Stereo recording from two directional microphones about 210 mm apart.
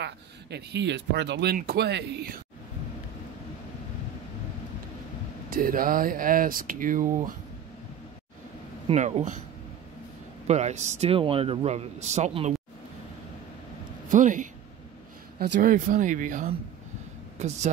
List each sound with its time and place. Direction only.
0.0 s speech: 55° right (ahead or behind)
5.5 s a man's voice: 40° right (ahead or behind)
8.8 s a man's voice: 30° right (ahead or behind)
10.4 s a man's voice: 30° right (ahead or behind)
14.0 s speech: 40° right (ahead or behind)
15.6 s a man's voice: 40° right (ahead or behind)